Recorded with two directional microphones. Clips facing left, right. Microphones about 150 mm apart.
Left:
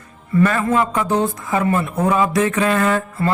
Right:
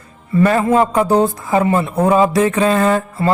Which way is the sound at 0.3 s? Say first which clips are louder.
Right 4 dB; 30° right (ahead or behind).